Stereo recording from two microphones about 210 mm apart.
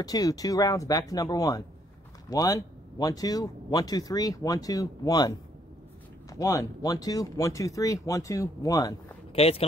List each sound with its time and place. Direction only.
0.0 s speech: 15° left (ahead or behind)
6.3 s speech: 15° left (ahead or behind)
9.3 s speech: 30° left (ahead or behind)